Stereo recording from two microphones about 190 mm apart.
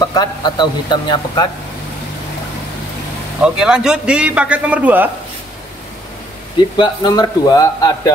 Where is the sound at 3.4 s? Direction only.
5° right (ahead or behind).